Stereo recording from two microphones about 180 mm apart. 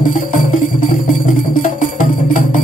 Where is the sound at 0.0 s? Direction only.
45° left (ahead or behind).